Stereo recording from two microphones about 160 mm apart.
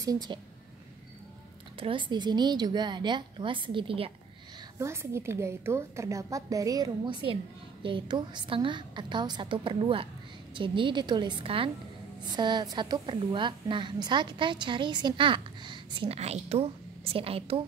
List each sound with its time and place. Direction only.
0.0 s a woman's voice: 25° right (ahead or behind)
1.8 s a woman's voice: 30° right (ahead or behind)
4.7 s a woman's voice: 15° right (ahead or behind); by 17.6 s 35° right (ahead or behind)